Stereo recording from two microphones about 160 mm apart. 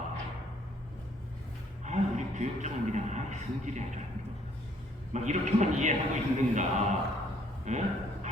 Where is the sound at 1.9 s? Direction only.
50° right (ahead or behind).